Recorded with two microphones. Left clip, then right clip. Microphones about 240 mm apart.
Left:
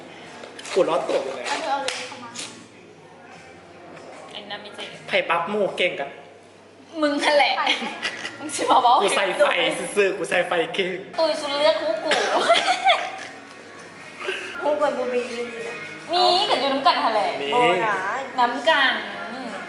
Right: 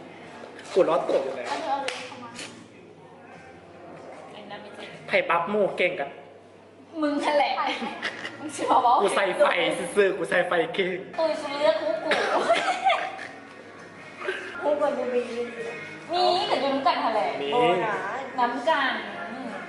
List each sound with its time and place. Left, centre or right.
0.7 s a woman's voice: centre
1.1 s a woman's voice: centre
5.0 s a woman's voice: centre
14.2 s a sound: centre
14.8 s a woman's voice: centre